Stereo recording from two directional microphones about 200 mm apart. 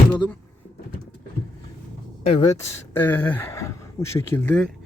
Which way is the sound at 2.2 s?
30° left (ahead or behind).